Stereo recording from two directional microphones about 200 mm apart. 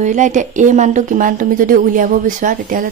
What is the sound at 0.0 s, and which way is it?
Speech, 35° right (ahead or behind).